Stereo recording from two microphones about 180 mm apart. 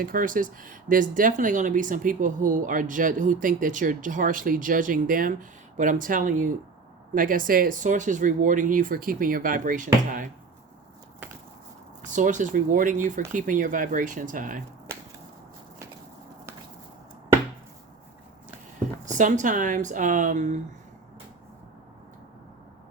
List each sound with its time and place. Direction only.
0.0 s speech: 50° right (ahead or behind)
12.0 s speech: 45° right (ahead or behind)
19.1 s speech: 45° right (ahead or behind)